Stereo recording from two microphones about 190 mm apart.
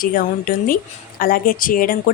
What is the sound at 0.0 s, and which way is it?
A woman's voice, 45° left (ahead or behind).